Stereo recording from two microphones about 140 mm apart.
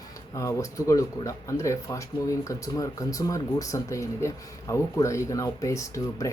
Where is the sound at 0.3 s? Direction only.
20° left (ahead or behind).